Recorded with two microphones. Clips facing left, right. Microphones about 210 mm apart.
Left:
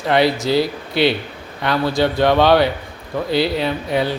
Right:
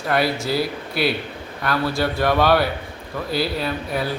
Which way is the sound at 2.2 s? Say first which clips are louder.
Left 3 dB; 20° left (ahead or behind).